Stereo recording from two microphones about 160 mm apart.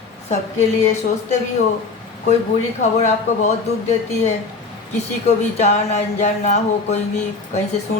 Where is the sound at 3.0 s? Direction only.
45° left (ahead or behind).